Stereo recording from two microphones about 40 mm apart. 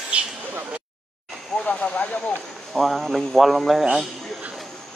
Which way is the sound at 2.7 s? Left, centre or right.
Centre.